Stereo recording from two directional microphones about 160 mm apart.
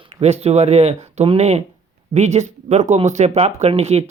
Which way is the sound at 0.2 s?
40° right (ahead or behind).